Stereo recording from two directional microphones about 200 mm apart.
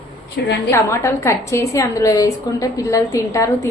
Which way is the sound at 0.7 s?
15° left (ahead or behind).